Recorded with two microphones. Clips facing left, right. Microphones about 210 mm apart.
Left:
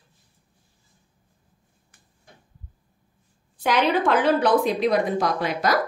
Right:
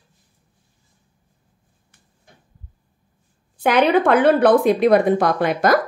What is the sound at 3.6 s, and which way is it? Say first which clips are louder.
Speech: right 5 dB; 55° right (ahead or behind).